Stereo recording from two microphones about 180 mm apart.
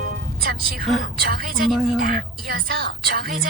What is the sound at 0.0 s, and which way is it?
Music, 55° right (ahead or behind).